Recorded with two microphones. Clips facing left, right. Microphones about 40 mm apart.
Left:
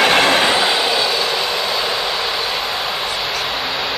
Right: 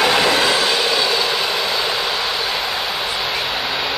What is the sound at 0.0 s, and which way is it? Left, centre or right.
Train, left.